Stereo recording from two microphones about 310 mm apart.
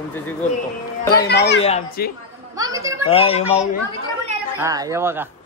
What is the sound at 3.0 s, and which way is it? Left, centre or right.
Speech, centre.